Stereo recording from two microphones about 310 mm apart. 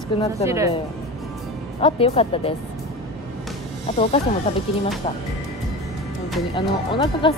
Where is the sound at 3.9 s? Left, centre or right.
Centre.